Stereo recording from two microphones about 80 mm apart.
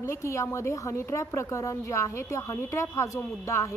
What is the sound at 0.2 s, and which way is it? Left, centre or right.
A woman's voice, left.